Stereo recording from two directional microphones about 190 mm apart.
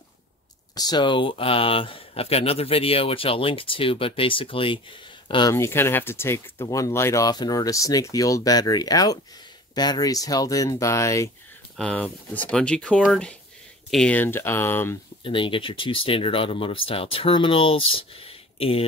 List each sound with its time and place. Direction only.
0.7 s speech: 20° left (ahead or behind)
15.2 s speech: 25° left (ahead or behind)